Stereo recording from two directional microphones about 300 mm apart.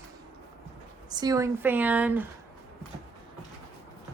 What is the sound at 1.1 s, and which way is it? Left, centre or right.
Speech, centre.